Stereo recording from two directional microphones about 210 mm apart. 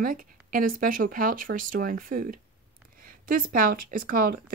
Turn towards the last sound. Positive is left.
turn(degrees=-45)  # may be behind; listen again after turning